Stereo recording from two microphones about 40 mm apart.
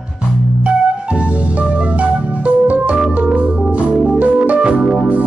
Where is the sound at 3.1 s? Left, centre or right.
Right.